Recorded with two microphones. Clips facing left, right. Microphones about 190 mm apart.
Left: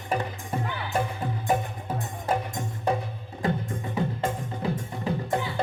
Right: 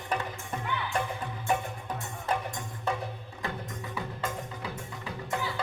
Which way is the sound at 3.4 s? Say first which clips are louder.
Left 8 dB; 35° left (ahead or behind).